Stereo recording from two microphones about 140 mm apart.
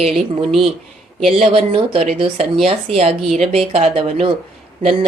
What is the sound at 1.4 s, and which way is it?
Speech, 40° right (ahead or behind).